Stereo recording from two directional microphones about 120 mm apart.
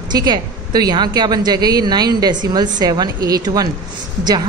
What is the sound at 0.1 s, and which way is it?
A woman's voice, 35° right (ahead or behind).